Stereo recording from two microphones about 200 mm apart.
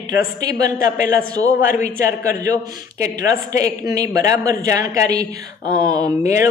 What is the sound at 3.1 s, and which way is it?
A man's voice, 15° right (ahead or behind).